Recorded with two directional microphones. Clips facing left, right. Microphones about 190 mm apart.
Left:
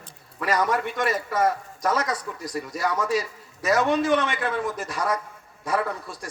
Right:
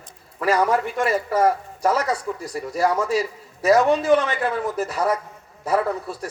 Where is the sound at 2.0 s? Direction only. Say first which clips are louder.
Right 4 dB; 10° right (ahead or behind).